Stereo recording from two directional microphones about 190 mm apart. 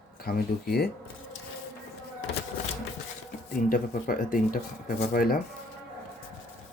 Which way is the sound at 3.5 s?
45° left (ahead or behind).